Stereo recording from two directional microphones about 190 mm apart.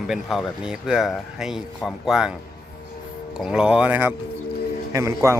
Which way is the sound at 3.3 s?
5° right (ahead or behind).